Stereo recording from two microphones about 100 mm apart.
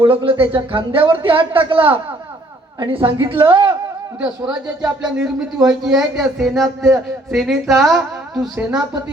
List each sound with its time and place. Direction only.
0.0 s a woman's voice: 55° right (ahead or behind)
4.2 s a man's voice: 10° right (ahead or behind)